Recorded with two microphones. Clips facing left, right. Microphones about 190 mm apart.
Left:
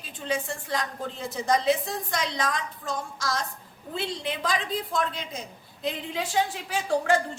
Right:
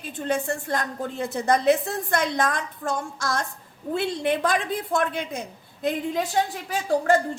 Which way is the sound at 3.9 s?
55° right (ahead or behind).